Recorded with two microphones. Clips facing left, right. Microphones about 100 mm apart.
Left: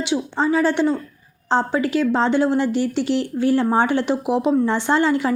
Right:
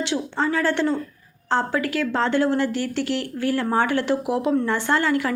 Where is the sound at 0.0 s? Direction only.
15° left (ahead or behind).